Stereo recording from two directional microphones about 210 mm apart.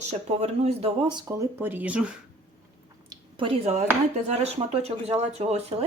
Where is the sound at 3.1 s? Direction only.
25° right (ahead or behind).